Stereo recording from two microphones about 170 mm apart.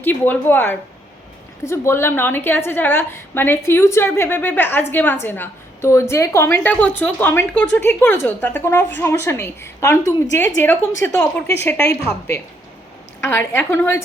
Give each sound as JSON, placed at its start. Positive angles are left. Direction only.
{"t": 0.0, "sound": "a woman's voice", "side_deg": 10}